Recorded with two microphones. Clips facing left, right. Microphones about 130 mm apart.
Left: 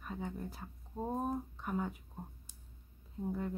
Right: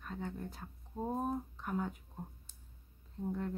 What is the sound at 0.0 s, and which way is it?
Speech, 5° left (ahead or behind).